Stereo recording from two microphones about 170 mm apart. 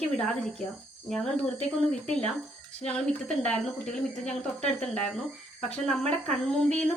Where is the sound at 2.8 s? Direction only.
5° left (ahead or behind).